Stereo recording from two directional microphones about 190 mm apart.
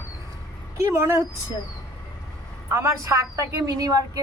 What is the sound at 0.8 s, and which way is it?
Speech, 15° right (ahead or behind).